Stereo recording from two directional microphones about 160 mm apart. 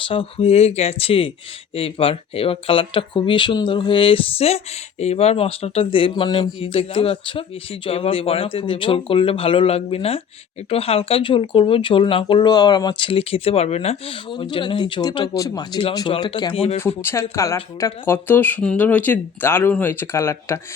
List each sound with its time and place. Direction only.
0.1 s speech: 35° left (ahead or behind)
16.8 s speech: 15° left (ahead or behind)